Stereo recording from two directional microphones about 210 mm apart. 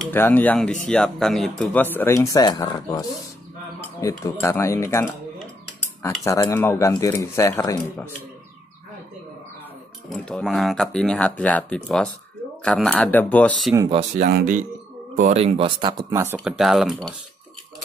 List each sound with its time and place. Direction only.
0.0 s speech: 10° left (ahead or behind)
4.0 s speech: 15° left (ahead or behind)
6.2 s speech: 15° left (ahead or behind)
10.0 s speech: 5° left (ahead or behind)
13.7 s speech: 20° right (ahead or behind)
14.1 s speech: 40° right (ahead or behind); by 16.3 s 15° right (ahead or behind)
16.3 s speech: centre (ahead or behind)